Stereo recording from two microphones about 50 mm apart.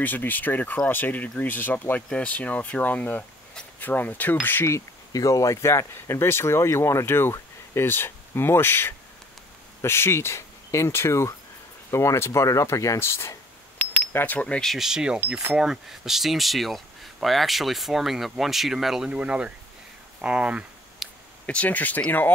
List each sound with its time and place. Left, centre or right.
0.0 s speech: left
2.1 s speech: left
4.6 s speech: left
14.2 s speech: left
14.8 s speech: centre
19.0 s speech: right
21.0 s a sound: centre
21.5 s speech: left